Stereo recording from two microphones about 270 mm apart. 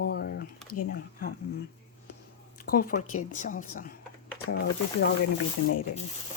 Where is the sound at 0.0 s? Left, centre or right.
Left.